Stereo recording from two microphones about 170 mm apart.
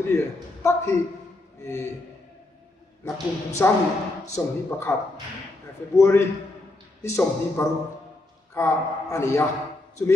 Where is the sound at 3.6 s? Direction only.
15° left (ahead or behind).